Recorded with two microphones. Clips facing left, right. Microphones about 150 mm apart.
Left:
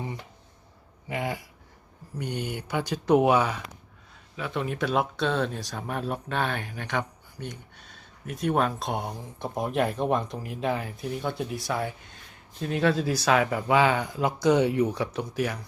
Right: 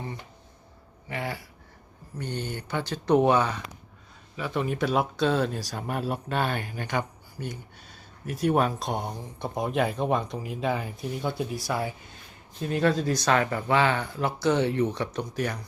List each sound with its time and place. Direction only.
1.0 s speech: 20° left (ahead or behind)